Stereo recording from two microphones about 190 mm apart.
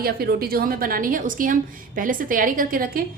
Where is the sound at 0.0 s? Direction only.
50° right (ahead or behind).